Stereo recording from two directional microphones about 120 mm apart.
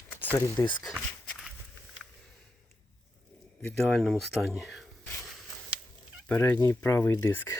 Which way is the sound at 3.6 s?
5° left (ahead or behind).